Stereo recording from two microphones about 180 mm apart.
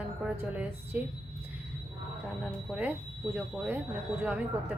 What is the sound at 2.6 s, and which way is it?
A woman's voice, 5° right (ahead or behind).